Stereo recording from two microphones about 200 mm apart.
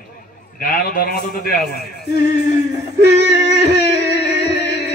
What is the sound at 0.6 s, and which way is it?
Speech, 45° left (ahead or behind).